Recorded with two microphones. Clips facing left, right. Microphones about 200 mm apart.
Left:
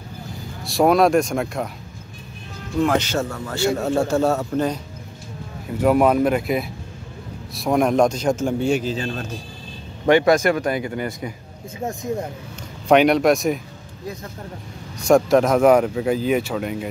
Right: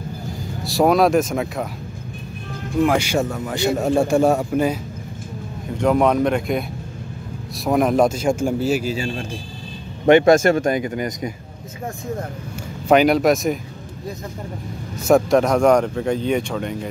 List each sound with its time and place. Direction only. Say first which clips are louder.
0.7 s speech: even; centre (ahead or behind)
2.8 s a man's voice: right 2 dB; 10° right (ahead or behind)
5.7 s a man's voice: left 1 dB; 5° left (ahead or behind)
10.0 s speech: right 3 dB; 25° right (ahead or behind)
12.8 s speech: even; centre (ahead or behind)
15.0 s speech: even; centre (ahead or behind)